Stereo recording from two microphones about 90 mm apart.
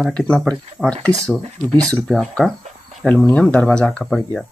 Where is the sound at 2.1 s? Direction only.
5° left (ahead or behind).